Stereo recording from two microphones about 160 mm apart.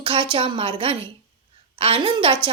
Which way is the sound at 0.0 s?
30° right (ahead or behind).